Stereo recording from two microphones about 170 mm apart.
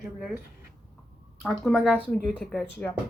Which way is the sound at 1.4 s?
Centre (ahead or behind).